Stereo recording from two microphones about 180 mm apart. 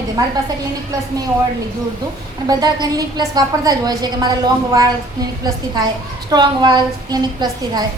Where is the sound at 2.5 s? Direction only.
20° right (ahead or behind).